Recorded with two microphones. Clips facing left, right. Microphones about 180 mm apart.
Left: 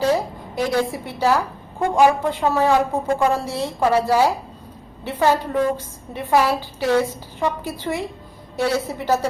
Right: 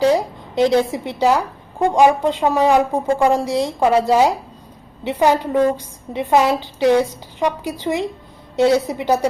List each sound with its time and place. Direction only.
0.0 s a woman's voice: 20° right (ahead or behind)